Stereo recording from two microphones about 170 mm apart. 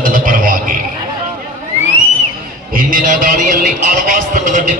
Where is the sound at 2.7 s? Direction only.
55° right (ahead or behind).